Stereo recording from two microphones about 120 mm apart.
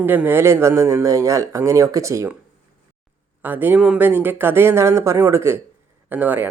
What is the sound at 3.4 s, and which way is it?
Speech, 15° right (ahead or behind).